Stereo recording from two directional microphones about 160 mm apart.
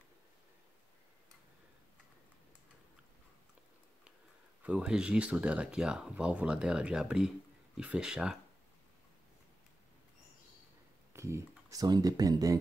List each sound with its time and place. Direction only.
4.6 s speech: 5° right (ahead or behind)
11.1 s speech: 15° right (ahead or behind)